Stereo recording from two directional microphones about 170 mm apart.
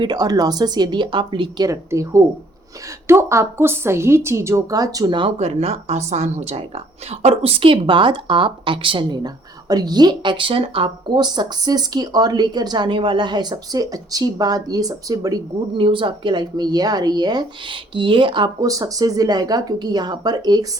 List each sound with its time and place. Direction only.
0.0 s a woman's voice: 25° right (ahead or behind)